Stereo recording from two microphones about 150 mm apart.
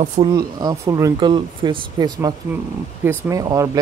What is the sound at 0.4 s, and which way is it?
Speech, 25° right (ahead or behind).